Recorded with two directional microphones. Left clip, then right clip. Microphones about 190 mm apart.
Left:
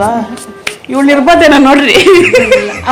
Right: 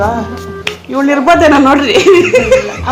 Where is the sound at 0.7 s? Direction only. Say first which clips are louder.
Left 3 dB; 45° left (ahead or behind).